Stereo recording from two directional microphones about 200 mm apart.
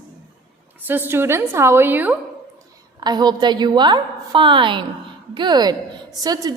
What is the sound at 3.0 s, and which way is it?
A woman's voice, 20° right (ahead or behind).